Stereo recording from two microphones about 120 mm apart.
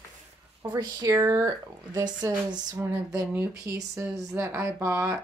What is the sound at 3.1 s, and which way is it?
Speech, 15° right (ahead or behind).